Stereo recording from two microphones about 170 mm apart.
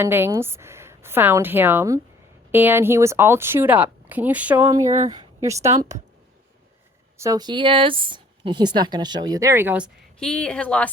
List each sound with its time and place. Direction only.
0.0 s speech: 15° right (ahead or behind)
4.9 s speech: 45° right (ahead or behind)
5.1 s a woman's voice: 20° right (ahead or behind)
7.2 s speech: 20° right (ahead or behind)
10.2 s speech: 5° left (ahead or behind)